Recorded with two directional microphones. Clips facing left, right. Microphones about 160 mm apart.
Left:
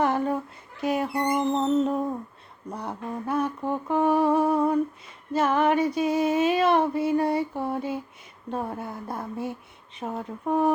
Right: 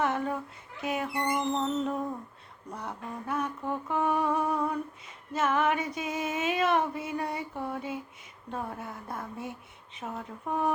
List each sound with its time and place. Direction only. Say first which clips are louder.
0.0 s a sound: left 5 dB; 35° left (ahead or behind)
0.8 s female singing: left 6 dB; 35° left (ahead or behind)
2.7 s female singing: left 6 dB; 35° left (ahead or behind)